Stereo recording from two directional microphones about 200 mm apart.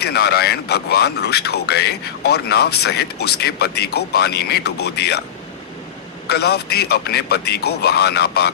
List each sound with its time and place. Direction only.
0.0 s speech: 55° left (ahead or behind)
6.2 s speech: 55° left (ahead or behind)